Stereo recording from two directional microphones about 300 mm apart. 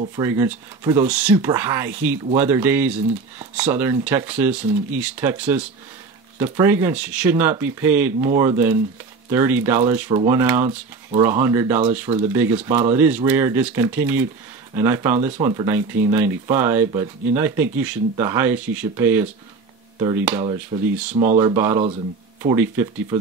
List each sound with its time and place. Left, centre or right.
0.0 s speech: centre
21.1 s speech: right
21.4 s speech: centre